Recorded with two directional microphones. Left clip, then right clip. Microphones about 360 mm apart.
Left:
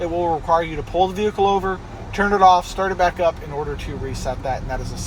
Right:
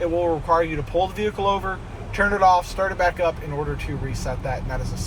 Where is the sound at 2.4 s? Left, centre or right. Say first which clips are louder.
Left 4 dB; centre.